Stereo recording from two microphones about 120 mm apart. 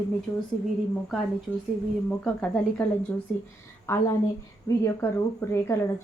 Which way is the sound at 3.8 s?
20° left (ahead or behind).